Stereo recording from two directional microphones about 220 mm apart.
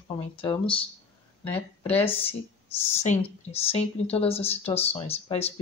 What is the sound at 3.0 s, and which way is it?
Speech, 30° left (ahead or behind).